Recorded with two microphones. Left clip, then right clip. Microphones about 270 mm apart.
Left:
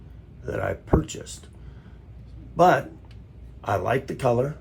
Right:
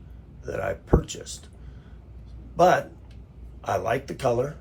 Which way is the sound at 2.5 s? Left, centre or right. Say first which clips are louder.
Left 1 dB; left.